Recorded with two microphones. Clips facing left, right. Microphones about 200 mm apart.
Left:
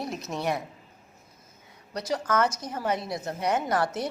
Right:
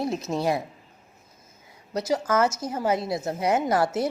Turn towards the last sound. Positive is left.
turn(degrees=-25)  # may be behind; listen again after turning